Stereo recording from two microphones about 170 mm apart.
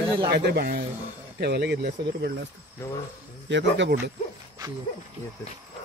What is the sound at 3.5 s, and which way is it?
Speech, 90° right.